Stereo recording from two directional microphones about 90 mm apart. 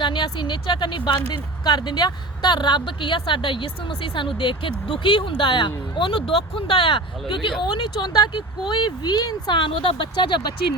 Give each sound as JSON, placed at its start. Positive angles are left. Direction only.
{"t": 0.0, "sound": "speech", "side_deg": 60}